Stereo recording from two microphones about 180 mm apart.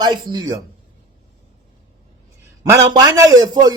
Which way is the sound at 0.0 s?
25° right (ahead or behind).